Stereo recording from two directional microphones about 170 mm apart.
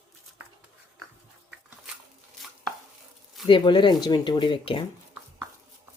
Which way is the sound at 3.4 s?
25° left (ahead or behind).